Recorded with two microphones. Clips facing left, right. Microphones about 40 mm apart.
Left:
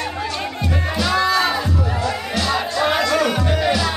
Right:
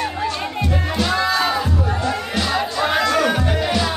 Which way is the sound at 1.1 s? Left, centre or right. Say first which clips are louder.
Left 2 dB; centre.